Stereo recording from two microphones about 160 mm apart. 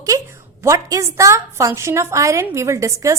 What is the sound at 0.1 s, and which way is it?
A woman's voice, 20° right (ahead or behind).